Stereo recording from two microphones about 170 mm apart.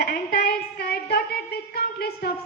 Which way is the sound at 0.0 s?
65° left (ahead or behind).